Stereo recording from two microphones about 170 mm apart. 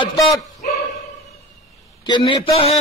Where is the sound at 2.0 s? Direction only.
25° left (ahead or behind).